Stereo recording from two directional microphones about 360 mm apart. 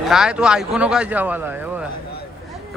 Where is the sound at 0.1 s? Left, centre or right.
Centre.